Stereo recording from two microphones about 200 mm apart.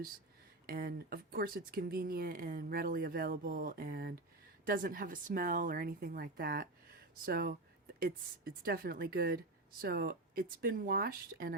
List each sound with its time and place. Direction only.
0.7 s speech: 50° right (ahead or behind)